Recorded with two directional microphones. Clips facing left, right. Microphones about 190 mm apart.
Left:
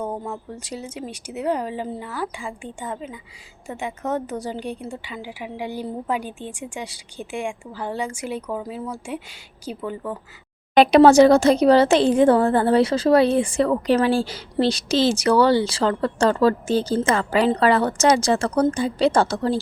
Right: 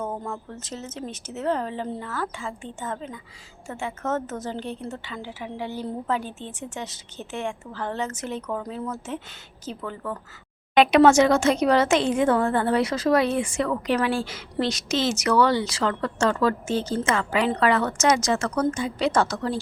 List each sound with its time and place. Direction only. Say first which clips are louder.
0.0 s a woman's voice: left 2 dB; 15° left (ahead or behind)
10.8 s speech: left 4 dB; 35° left (ahead or behind)